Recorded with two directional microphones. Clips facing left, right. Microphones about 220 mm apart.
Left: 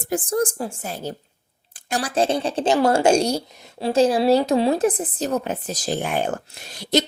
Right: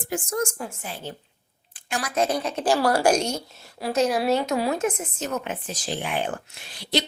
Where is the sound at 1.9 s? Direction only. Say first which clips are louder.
Left 3 dB; 30° left (ahead or behind).